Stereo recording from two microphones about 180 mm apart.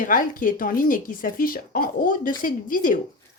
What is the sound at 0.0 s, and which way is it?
Speech, 50° left (ahead or behind).